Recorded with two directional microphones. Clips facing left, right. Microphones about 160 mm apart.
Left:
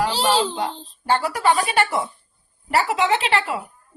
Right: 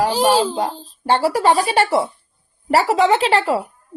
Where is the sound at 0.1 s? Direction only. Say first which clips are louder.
Right 5 dB; 15° right (ahead or behind).